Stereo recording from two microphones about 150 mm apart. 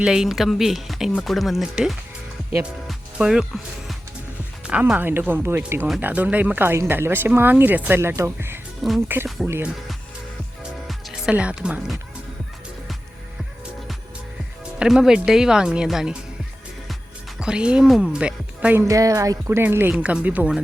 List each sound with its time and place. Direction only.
0.0 s speech: 5° right (ahead or behind)
2.6 s music: 5° right (ahead or behind)
4.7 s speech: 10° right (ahead or behind)
10.6 s music: 5° right (ahead or behind)
14.8 s speech: 5° right (ahead or behind)
17.4 s speech: 5° right (ahead or behind)